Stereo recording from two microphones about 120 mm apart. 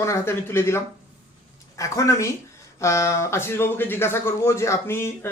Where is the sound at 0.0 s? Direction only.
20° left (ahead or behind).